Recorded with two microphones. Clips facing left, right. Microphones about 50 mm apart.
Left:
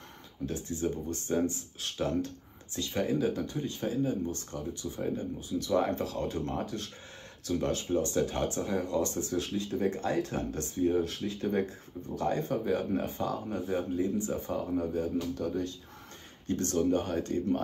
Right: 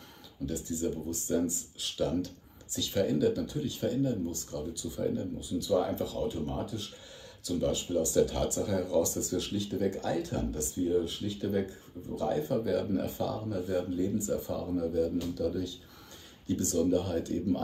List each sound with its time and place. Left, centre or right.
0.5 s speech: left